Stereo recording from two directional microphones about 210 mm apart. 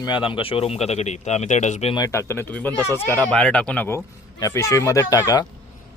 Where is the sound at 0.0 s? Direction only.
25° left (ahead or behind).